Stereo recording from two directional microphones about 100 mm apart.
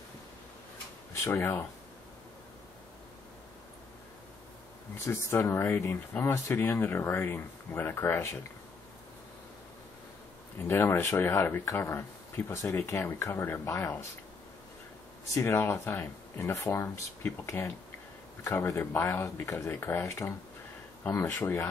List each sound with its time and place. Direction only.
1.2 s speech: 25° left (ahead or behind)
4.9 s speech: 25° left (ahead or behind)
10.7 s speech: 25° left (ahead or behind)
13.7 s speech: 30° left (ahead or behind)
15.3 s speech: 30° left (ahead or behind)
18.8 s speech: 25° left (ahead or behind)